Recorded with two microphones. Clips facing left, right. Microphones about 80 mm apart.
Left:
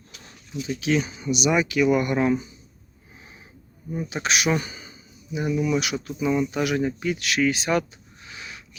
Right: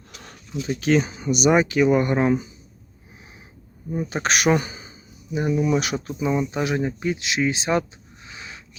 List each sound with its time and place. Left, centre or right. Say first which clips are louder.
0.2 s speech: right 2 dB; right
4.1 s speech: right 4 dB; right
4.6 s speech: right 2 dB; right